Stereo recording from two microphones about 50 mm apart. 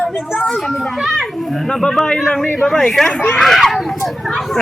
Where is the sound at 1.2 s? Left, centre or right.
Centre.